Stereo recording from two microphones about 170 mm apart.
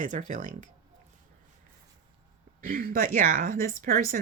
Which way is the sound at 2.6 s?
55° right (ahead or behind).